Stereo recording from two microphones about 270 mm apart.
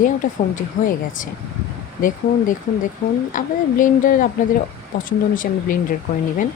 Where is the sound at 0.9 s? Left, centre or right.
Left.